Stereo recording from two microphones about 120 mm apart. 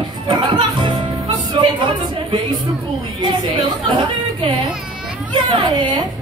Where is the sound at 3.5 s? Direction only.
35° right (ahead or behind).